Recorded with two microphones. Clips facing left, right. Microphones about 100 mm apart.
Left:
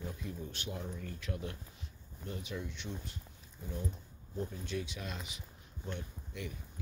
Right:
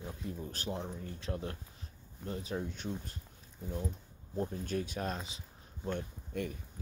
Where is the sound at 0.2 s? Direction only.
35° right (ahead or behind).